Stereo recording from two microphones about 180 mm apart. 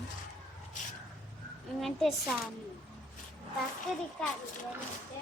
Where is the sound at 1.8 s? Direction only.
Centre (ahead or behind).